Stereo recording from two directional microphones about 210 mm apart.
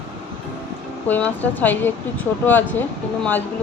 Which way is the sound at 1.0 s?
10° left (ahead or behind).